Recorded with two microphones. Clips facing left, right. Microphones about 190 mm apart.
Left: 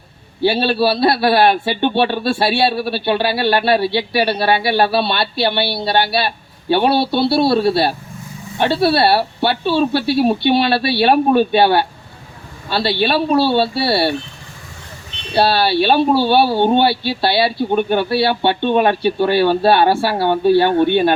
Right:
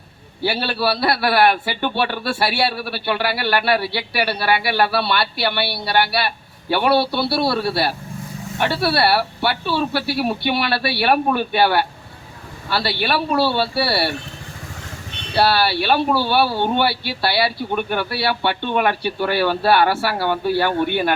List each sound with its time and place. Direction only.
0.4 s a man's voice: 25° left (ahead or behind)
15.4 s a man's voice: 25° left (ahead or behind)